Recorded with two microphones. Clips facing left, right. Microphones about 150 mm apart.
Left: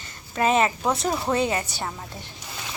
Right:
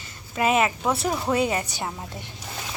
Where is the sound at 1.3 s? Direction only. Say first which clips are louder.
Even; 10° right (ahead or behind).